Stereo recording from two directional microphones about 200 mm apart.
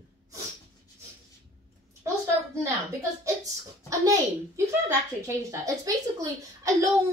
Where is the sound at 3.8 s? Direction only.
15° right (ahead or behind).